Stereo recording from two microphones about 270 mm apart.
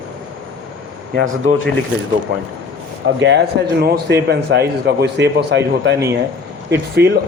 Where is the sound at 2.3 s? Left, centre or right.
Right.